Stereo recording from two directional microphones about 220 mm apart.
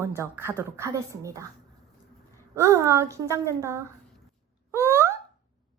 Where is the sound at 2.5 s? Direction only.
15° right (ahead or behind).